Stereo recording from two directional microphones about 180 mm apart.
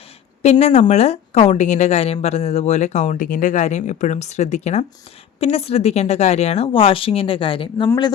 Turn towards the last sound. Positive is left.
turn(degrees=30)  # may be behind; listen again after turning